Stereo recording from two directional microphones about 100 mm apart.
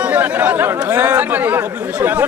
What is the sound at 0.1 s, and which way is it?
Speech, 20° right (ahead or behind).